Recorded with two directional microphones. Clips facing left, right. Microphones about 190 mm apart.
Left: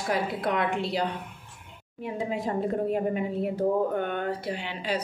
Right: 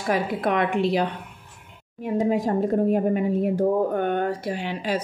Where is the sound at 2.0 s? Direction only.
45° right (ahead or behind).